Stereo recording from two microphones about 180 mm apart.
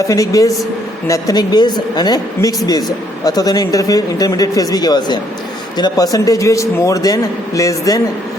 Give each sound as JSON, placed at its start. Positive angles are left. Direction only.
{"t": 0.1, "sound": "a man's voice", "side_deg": 20}